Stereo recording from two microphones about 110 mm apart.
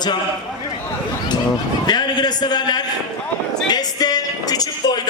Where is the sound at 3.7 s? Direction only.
35° left (ahead or behind).